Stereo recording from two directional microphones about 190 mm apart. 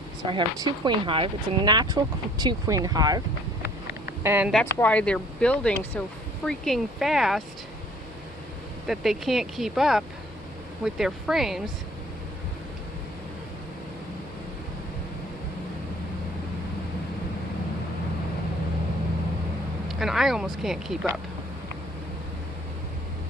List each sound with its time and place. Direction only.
0.2 s speech: 25° right (ahead or behind)
4.6 s speech: 10° left (ahead or behind)
8.9 s speech: centre (ahead or behind)
19.9 s speech: centre (ahead or behind)